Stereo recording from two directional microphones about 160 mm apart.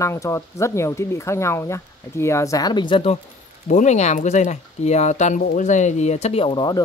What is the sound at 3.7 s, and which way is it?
Speech, 50° left (ahead or behind).